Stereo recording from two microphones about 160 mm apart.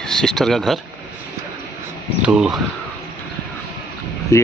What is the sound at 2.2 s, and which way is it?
Speech, 5° right (ahead or behind).